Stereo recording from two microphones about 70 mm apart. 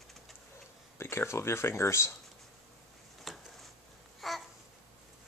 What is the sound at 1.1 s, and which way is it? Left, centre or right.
Speech, left.